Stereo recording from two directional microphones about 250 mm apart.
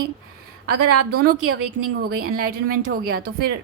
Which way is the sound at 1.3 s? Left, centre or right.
Right.